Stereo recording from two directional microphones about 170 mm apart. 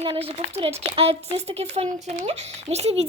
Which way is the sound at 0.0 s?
35° right (ahead or behind).